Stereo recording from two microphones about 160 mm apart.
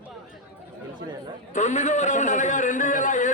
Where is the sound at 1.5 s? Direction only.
50° left (ahead or behind).